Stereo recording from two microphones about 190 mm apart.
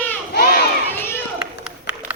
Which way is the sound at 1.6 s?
10° right (ahead or behind).